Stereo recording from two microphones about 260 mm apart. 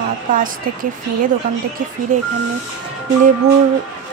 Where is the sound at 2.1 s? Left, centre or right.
Right.